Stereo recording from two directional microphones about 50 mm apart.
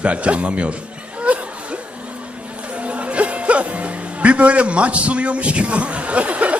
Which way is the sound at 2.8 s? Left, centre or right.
Right.